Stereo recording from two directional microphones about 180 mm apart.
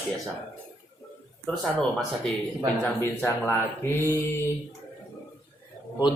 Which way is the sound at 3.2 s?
10° left (ahead or behind).